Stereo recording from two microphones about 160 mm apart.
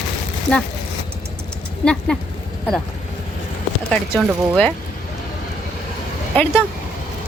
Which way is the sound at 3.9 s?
5° left (ahead or behind).